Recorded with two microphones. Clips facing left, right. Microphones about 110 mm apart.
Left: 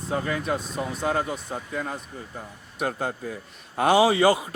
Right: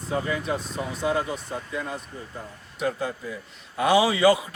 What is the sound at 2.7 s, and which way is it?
Speech, 50° left (ahead or behind).